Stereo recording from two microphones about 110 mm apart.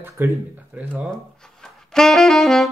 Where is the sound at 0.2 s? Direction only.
20° right (ahead or behind).